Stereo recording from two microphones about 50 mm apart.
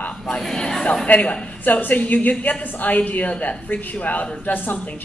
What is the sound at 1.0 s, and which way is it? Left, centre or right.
Speech, left.